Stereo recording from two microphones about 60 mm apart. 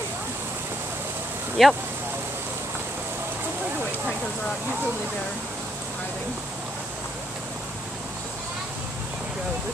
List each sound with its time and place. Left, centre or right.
1.6 s speech: centre